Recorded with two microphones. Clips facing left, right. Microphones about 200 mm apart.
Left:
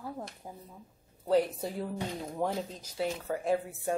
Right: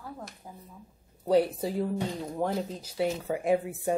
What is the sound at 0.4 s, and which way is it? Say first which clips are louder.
Speech: left 1 dB; 20° left (ahead or behind).